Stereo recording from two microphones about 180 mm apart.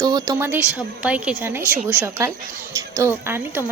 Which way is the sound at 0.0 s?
20° right (ahead or behind).